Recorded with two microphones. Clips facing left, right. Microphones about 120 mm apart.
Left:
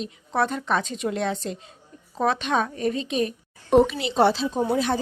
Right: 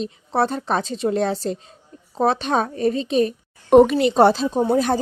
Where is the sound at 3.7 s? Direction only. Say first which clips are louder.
Right 6 dB; 55° right (ahead or behind).